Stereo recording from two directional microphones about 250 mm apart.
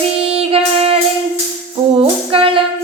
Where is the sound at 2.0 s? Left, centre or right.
Right.